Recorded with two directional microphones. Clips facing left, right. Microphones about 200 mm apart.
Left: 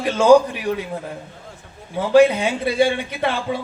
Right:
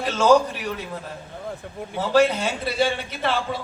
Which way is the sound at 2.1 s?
10° left (ahead or behind).